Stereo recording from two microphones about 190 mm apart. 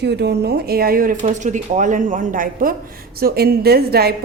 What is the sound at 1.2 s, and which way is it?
A woman's voice, 40° right (ahead or behind).